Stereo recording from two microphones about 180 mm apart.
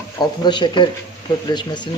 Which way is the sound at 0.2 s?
25° left (ahead or behind).